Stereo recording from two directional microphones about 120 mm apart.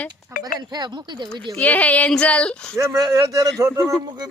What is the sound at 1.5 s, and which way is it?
Speech, 15° left (ahead or behind).